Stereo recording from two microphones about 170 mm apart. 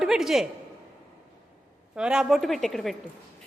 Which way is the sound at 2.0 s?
5° right (ahead or behind).